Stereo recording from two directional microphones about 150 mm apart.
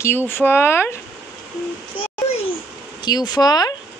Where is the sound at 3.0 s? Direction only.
25° left (ahead or behind).